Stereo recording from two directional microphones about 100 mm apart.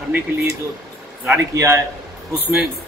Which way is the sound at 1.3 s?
25° right (ahead or behind).